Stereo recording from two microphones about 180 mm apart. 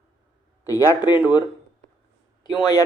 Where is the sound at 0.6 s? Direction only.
20° left (ahead or behind).